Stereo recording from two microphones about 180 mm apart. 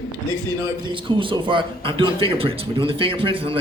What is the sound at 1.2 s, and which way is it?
Speech, 30° right (ahead or behind).